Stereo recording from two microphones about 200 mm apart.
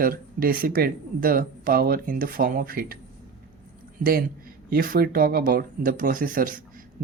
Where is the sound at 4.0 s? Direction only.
45° right (ahead or behind).